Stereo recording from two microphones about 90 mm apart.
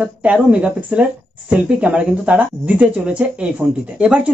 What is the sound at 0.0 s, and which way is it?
Speech, 15° right (ahead or behind).